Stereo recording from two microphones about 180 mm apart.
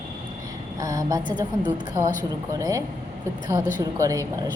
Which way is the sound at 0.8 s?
20° right (ahead or behind).